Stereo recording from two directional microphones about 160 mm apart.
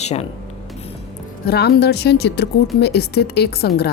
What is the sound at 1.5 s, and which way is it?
A woman's voice, 85° left.